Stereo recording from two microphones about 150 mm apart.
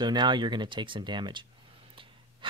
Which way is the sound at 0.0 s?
30° right (ahead or behind).